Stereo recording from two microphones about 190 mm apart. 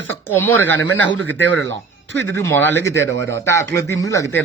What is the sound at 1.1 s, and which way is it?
Speech, 85° right.